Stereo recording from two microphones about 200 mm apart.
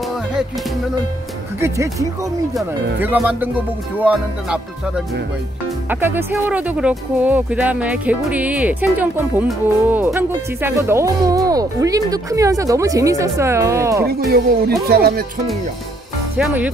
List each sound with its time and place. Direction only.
0.1 s music: 5° right (ahead or behind)
1.6 s speech: 15° right (ahead or behind)
14.0 s speech: 50° right (ahead or behind)
16.3 s speech: 5° right (ahead or behind)